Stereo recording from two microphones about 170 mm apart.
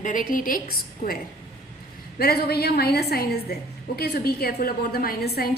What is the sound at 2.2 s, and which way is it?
A woman's voice, 65° left (ahead or behind).